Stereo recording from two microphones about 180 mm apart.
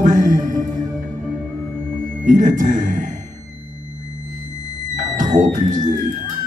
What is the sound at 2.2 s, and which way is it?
Music, 45° right (ahead or behind).